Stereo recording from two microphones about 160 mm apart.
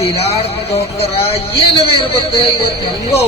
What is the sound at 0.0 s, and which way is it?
Speech, 40° left (ahead or behind).